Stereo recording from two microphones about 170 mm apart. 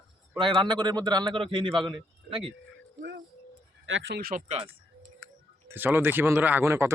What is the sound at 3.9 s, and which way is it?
Speech, 70° right (ahead or behind).